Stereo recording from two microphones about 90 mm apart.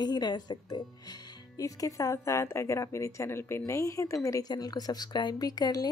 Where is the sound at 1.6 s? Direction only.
40° left (ahead or behind).